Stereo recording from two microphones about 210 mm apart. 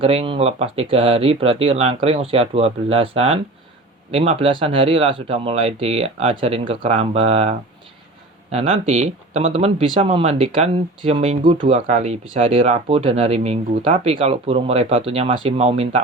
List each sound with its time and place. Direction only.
0.0 s speech: 25° right (ahead or behind)
8.5 s speech: 35° right (ahead or behind)